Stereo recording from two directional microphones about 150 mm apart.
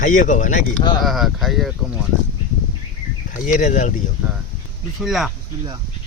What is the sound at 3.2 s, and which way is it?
Speech, 55° left (ahead or behind).